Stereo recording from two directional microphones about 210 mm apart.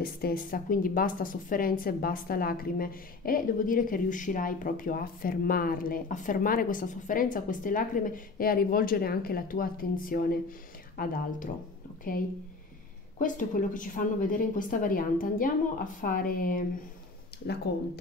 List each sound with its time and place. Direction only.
0.0 s speech: 45° left (ahead or behind)
17.7 s speech: 50° left (ahead or behind)